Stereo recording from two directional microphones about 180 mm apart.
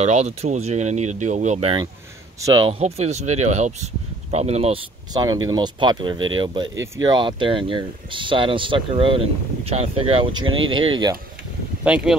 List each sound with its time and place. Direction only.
0.0 s speech: 35° right (ahead or behind)
5.1 s speech: 20° right (ahead or behind)
11.8 s speech: 5° right (ahead or behind)